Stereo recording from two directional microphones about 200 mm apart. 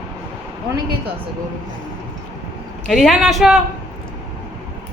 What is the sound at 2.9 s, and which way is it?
Speech, centre (ahead or behind).